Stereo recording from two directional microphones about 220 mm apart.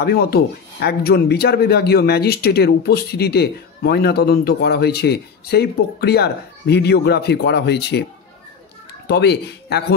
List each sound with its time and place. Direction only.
0.0 s speech: 45° left (ahead or behind)
9.0 s speech: 50° left (ahead or behind)